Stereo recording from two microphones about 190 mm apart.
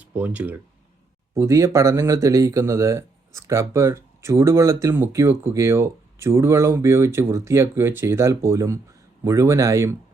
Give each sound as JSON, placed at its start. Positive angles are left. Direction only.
{"t": 0.0, "sound": "speech", "side_deg": -10}